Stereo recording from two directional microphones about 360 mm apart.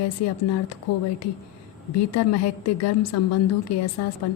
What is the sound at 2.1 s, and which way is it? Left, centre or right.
A woman's voice, left.